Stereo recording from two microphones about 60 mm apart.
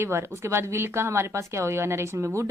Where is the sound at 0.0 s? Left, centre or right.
Right.